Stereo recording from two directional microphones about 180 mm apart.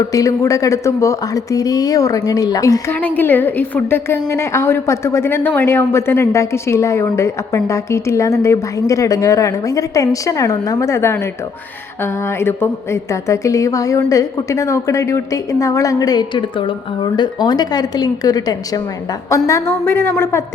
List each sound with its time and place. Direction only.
0.0 s speech: 20° left (ahead or behind)
12.4 s a woman's voice: 10° left (ahead or behind)